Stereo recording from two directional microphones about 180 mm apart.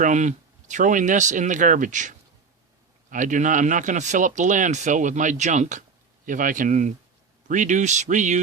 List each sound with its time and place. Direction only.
0.0 s speech: 45° right (ahead or behind)